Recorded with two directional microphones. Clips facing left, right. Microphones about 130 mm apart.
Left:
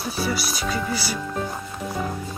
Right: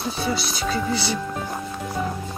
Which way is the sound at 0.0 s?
25° right (ahead or behind).